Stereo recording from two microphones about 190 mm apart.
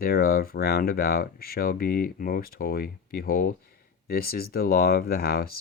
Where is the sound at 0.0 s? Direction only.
55° left (ahead or behind).